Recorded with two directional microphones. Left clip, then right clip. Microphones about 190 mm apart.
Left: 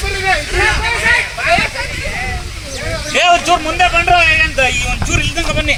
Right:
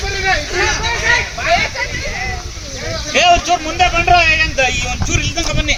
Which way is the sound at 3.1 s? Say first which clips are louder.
Left 1 dB; 30° left (ahead or behind).